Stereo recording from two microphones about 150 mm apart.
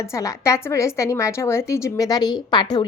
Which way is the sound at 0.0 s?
20° left (ahead or behind).